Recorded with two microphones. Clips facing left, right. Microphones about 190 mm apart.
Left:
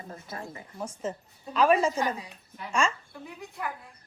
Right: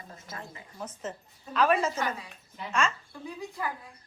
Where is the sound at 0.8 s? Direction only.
10° left (ahead or behind).